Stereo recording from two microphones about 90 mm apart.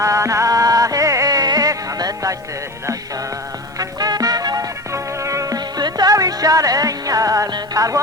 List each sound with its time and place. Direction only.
0.0 s music: 35° right (ahead or behind)
3.8 s music: 45° right (ahead or behind)